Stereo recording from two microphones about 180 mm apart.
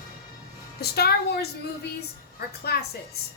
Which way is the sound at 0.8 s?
60° left (ahead or behind).